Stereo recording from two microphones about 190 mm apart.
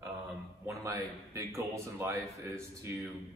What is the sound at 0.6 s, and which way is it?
A man's voice, 15° right (ahead or behind).